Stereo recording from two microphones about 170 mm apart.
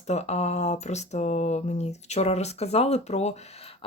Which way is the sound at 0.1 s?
40° left (ahead or behind).